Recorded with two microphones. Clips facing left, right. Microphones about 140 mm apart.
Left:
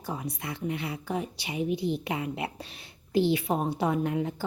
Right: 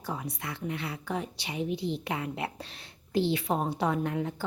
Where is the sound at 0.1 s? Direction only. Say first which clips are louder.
Left 1 dB; 15° left (ahead or behind).